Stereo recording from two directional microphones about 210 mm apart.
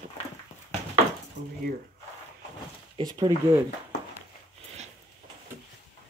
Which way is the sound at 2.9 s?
20° right (ahead or behind).